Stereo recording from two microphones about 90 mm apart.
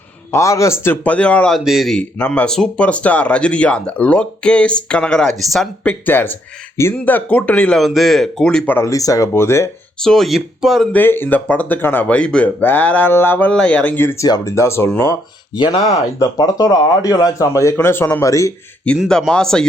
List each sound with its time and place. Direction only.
0.3 s speech: 35° left (ahead or behind)
1.0 s speech: 15° left (ahead or behind)
1.5 s speech: centre (ahead or behind)
2.1 s speech: 15° left (ahead or behind)
5.8 s speech: 20° left (ahead or behind)
7.8 s speech: centre (ahead or behind)
8.8 s speech: 40° left (ahead or behind)
9.3 s speech: 30° left (ahead or behind)
10.0 s speech: 5° left (ahead or behind)
10.9 s speech: 25° left (ahead or behind)
13.5 s speech: 10° left (ahead or behind)
14.2 s speech: 45° left (ahead or behind)
15.1 s speech: 55° left (ahead or behind); by 18.5 s 35° left (ahead or behind)
18.9 s speech: 15° left (ahead or behind)